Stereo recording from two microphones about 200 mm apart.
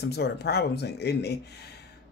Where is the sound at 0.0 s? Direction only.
55° left (ahead or behind).